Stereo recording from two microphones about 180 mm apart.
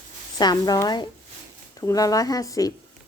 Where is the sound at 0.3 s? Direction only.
20° left (ahead or behind).